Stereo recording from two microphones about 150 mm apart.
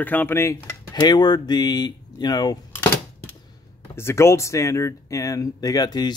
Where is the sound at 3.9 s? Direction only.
15° left (ahead or behind).